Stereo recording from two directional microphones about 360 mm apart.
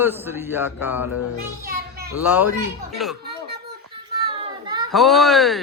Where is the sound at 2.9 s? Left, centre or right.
Centre.